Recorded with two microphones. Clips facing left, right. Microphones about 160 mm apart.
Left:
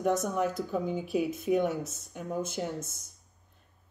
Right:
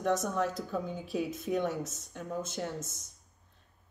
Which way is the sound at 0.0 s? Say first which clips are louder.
Left 2 dB; 10° left (ahead or behind).